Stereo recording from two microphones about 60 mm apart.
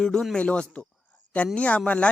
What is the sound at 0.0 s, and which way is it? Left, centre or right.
Speech, centre.